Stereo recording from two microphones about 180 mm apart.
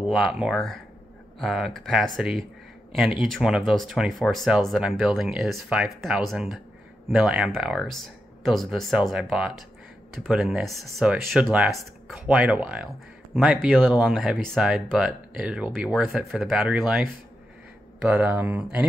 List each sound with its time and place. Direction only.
0.1 s speech: centre (ahead or behind)